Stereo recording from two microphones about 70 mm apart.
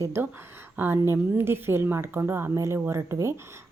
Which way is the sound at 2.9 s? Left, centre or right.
Right.